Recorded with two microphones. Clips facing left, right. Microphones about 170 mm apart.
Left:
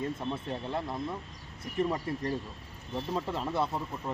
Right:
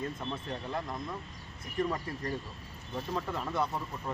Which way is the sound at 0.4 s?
25° left (ahead or behind).